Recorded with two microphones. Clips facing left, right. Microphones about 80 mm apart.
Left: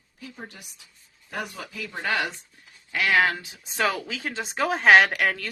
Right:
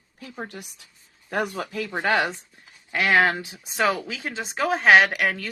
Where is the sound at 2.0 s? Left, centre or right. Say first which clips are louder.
Right 4 dB; right.